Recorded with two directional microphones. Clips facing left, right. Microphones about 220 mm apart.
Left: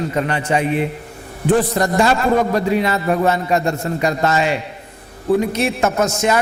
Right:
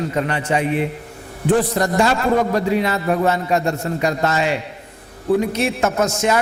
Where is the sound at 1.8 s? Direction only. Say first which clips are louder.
Left 1 dB; 20° left (ahead or behind).